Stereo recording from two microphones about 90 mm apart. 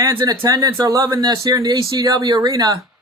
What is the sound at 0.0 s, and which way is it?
Speech, 40° right (ahead or behind).